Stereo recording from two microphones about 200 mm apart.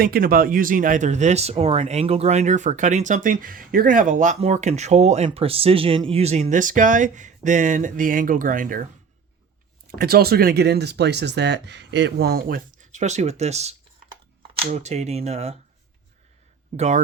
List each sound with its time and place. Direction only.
0.0 s speech: 45° right (ahead or behind)
9.9 s speech: 50° right (ahead or behind); by 15.5 s 30° right (ahead or behind)
16.7 s speech: 35° right (ahead or behind)